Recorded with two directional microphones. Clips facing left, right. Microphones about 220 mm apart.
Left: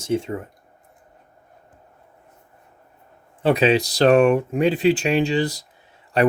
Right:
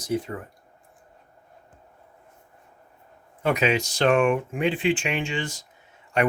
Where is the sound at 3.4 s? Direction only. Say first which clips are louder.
Left 6 dB; 30° left (ahead or behind).